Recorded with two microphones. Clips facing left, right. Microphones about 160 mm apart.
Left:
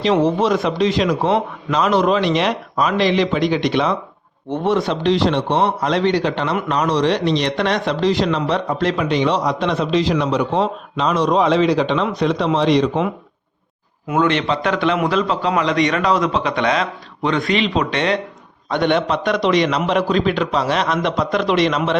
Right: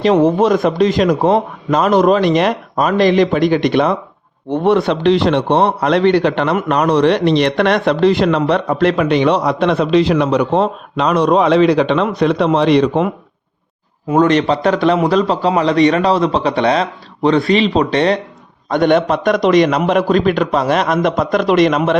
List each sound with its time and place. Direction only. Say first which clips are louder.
0.0 s a man's voice: right 4 dB; 50° right (ahead or behind)
14.1 s a man's voice: right 5 dB; 40° right (ahead or behind)
18.7 s a man's voice: right 5 dB; 45° right (ahead or behind)